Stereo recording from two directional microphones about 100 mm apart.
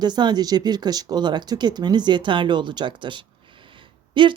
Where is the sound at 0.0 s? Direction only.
45° right (ahead or behind).